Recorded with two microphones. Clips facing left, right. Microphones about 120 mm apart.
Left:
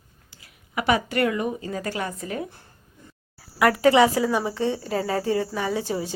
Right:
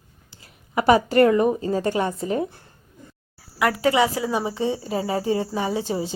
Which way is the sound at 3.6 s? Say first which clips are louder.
Left 3 dB; 15° right (ahead or behind).